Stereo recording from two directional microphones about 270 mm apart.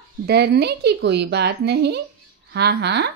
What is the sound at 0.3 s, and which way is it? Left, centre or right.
Speech, right.